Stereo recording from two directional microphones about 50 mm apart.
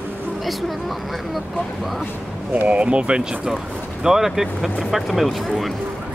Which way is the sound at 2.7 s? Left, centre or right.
Right.